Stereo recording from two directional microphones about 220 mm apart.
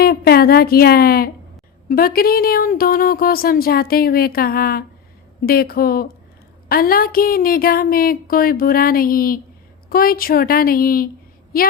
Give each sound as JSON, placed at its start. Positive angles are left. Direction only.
{"t": 0.0, "sound": "a woman's voice", "side_deg": 45}